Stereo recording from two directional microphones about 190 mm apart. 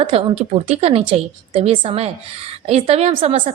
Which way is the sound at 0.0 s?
30° right (ahead or behind).